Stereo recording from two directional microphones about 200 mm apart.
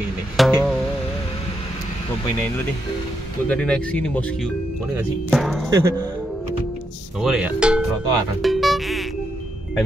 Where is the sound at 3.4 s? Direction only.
5° left (ahead or behind).